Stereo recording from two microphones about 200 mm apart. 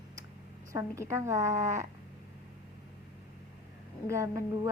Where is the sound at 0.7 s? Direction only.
15° right (ahead or behind).